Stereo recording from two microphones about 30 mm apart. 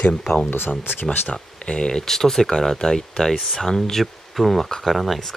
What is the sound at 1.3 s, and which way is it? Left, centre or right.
Speech, left.